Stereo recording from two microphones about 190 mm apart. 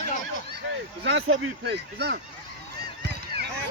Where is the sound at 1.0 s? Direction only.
80° right; by 2.1 s 60° right (ahead or behind).